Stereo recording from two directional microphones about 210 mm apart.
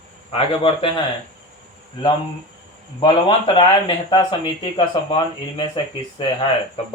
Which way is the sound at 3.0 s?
25° left (ahead or behind).